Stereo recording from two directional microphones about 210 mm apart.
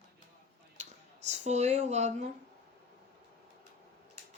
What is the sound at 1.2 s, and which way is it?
Speech, 35° right (ahead or behind).